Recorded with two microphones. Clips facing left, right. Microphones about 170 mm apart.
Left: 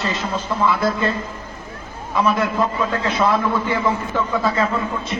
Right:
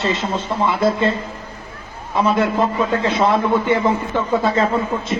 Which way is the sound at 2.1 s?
25° right (ahead or behind).